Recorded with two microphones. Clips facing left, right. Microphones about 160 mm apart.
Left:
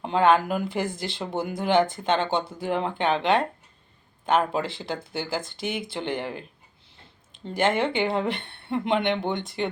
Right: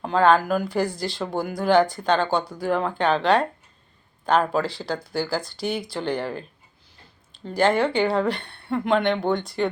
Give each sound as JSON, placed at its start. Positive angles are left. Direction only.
{"t": 0.0, "sound": "speech", "side_deg": 20}
{"t": 7.4, "sound": "speech", "side_deg": 20}